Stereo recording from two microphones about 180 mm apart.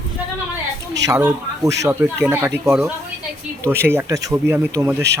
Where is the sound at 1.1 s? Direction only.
15° right (ahead or behind).